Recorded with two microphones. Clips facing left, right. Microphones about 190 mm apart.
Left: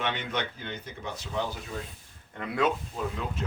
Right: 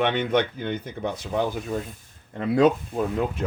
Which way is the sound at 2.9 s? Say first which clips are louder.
Right 8 dB; 55° right (ahead or behind).